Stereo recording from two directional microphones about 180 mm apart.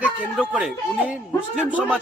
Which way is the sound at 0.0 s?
5° right (ahead or behind).